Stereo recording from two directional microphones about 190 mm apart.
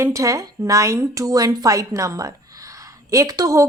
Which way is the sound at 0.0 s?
15° right (ahead or behind).